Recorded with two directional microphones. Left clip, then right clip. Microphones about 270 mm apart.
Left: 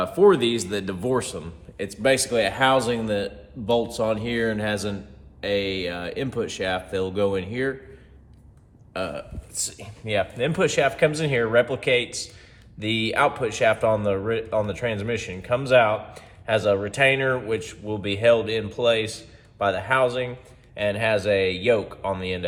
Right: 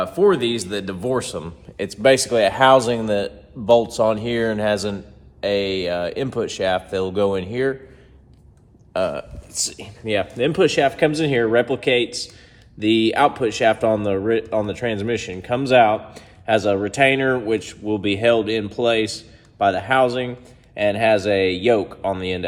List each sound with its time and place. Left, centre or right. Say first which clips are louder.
0.0 s speech: right 1 dB; centre
1.7 s a man's voice: right 6 dB; right
8.9 s speech: right 7 dB; right